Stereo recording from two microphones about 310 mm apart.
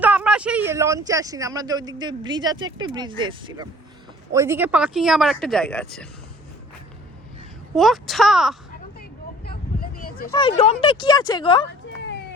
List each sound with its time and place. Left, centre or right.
0.0 s speech: centre
7.8 s speech: centre
9.0 s vehicle: left
10.0 s a sound: left
10.3 s speech: centre